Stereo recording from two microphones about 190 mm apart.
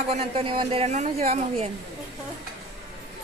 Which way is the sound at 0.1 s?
30° right (ahead or behind).